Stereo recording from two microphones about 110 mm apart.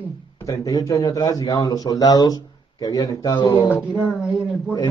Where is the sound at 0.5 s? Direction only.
35° left (ahead or behind).